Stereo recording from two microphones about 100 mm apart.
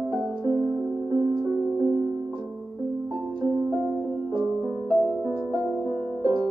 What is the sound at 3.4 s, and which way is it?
Music, 40° right (ahead or behind).